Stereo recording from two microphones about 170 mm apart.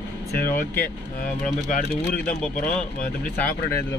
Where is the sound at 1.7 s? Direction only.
55° left (ahead or behind).